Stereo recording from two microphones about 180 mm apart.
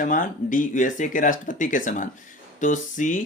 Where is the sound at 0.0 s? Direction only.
45° left (ahead or behind).